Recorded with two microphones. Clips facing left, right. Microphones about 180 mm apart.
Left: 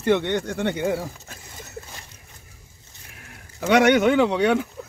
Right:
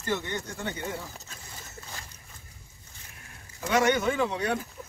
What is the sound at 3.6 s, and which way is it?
Speech, 75° left (ahead or behind).